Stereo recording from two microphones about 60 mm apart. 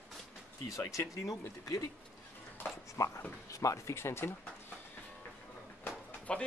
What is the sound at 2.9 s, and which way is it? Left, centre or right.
Speech, left.